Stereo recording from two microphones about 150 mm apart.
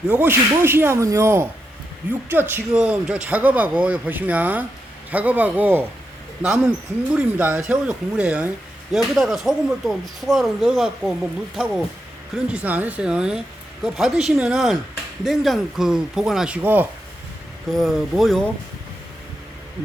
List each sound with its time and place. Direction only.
0.1 s speech: 15° right (ahead or behind)
17.7 s speech: centre (ahead or behind)